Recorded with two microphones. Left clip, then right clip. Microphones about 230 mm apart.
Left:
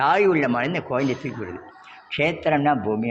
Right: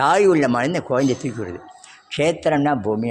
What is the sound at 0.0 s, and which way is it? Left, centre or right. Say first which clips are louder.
Speech: right 3 dB; right.